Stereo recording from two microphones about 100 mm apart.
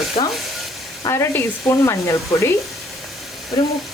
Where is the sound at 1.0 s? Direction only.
25° left (ahead or behind).